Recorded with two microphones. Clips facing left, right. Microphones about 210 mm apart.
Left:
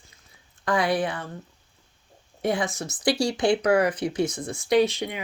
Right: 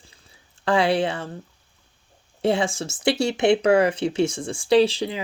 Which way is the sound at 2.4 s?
30° right (ahead or behind).